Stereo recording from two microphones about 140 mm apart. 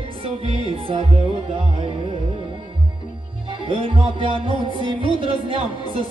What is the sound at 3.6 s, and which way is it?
Music, 40° right (ahead or behind).